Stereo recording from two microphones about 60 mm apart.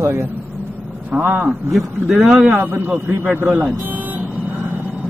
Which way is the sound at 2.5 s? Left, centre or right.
Right.